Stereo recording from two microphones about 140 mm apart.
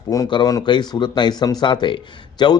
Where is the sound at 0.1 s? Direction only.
30° left (ahead or behind).